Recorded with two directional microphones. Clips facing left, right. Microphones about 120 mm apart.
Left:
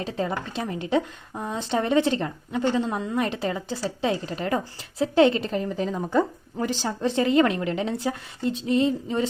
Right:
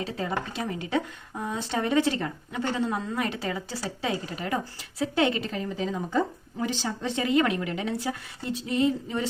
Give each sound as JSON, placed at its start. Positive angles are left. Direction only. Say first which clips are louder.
{"t": 0.2, "sound": "a woman's voice", "louder": "left 4 dB", "side_deg": 25}
{"t": 6.1, "sound": "speech", "louder": "left 4 dB", "side_deg": 50}
{"t": 7.0, "sound": "a woman's voice", "louder": "left 4 dB", "side_deg": 35}